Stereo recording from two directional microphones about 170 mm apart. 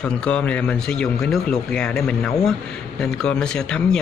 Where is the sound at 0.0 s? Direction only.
5° left (ahead or behind).